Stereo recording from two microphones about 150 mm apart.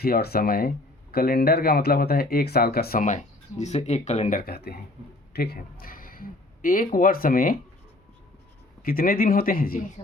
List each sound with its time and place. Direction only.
0.0 s speech: 90° left
3.1 s speech: 50° left (ahead or behind)
4.4 s speech: 90° left; by 7.6 s 70° left (ahead or behind)
8.8 s speech: 75° left (ahead or behind)